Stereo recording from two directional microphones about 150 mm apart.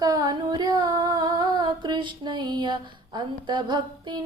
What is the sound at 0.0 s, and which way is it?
Female singing, 25° right (ahead or behind).